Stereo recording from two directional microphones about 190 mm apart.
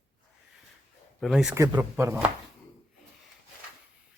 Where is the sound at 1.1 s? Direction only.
Centre (ahead or behind).